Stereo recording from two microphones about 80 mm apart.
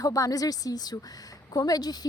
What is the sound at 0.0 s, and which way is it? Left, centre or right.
A woman's voice, left.